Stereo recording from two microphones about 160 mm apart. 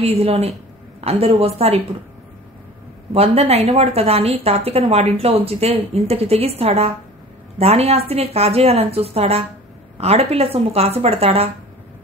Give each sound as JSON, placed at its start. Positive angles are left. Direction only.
{"t": 0.0, "sound": "speech", "side_deg": -40}
{"t": 3.1, "sound": "speech", "side_deg": -40}